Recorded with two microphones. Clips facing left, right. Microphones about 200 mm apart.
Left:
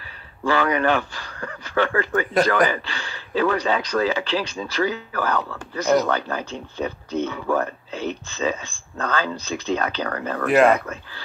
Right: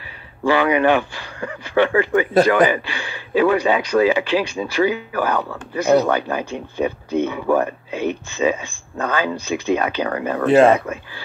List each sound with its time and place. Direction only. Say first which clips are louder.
0.4 s speech: right 4 dB; 15° right (ahead or behind)
10.4 s speech: right 4 dB; 25° right (ahead or behind)